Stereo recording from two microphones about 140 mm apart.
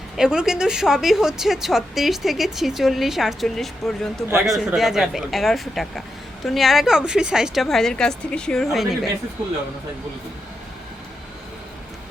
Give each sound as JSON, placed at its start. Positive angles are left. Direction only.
{"t": 0.2, "sound": "a woman's voice", "side_deg": -5}